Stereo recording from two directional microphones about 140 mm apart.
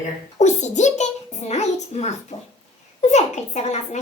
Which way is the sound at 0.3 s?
55° left (ahead or behind).